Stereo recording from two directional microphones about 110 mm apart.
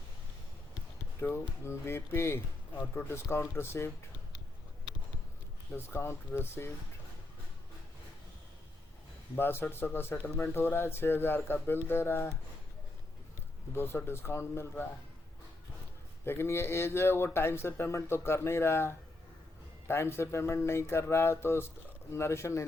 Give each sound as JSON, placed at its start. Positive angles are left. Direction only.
{"t": 1.2, "sound": "speech", "side_deg": 20}
{"t": 5.7, "sound": "speech", "side_deg": 20}
{"t": 9.3, "sound": "speech", "side_deg": 20}
{"t": 13.7, "sound": "speech", "side_deg": 20}
{"t": 16.2, "sound": "speech", "side_deg": 20}